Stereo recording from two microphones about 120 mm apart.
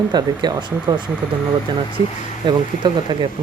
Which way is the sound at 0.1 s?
35° right (ahead or behind).